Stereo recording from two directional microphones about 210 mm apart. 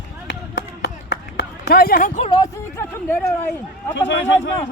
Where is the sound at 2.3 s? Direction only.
15° left (ahead or behind).